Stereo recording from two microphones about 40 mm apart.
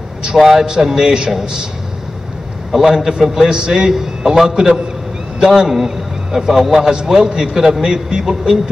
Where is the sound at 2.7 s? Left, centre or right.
Centre.